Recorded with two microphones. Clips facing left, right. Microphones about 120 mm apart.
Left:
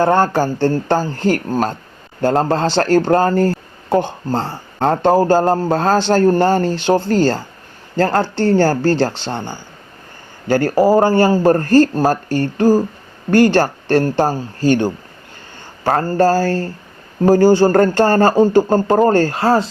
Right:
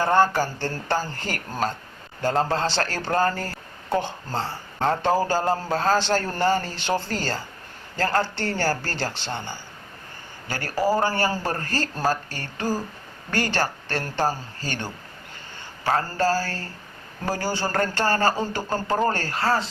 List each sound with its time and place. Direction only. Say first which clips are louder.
0.2 s speech: left 6 dB; 50° left (ahead or behind)